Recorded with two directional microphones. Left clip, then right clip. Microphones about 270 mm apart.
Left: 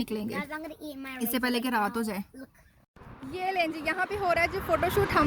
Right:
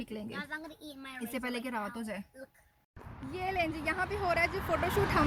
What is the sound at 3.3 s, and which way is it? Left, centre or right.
Speech, centre.